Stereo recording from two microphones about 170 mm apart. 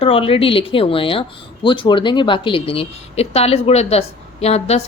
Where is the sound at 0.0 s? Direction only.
35° left (ahead or behind).